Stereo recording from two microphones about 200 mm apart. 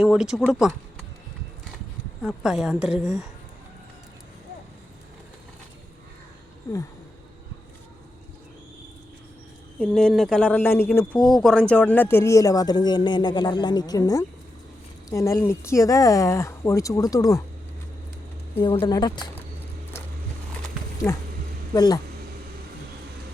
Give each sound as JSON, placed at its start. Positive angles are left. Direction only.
{"t": 0.0, "sound": "speech", "side_deg": -5}
{"t": 2.2, "sound": "speech", "side_deg": 0}
{"t": 6.7, "sound": "speech", "side_deg": 15}
{"t": 9.7, "sound": "speech", "side_deg": 5}
{"t": 18.6, "sound": "a woman's voice", "side_deg": 25}
{"t": 21.0, "sound": "speech", "side_deg": 5}
{"t": 21.7, "sound": "a woman's voice", "side_deg": 20}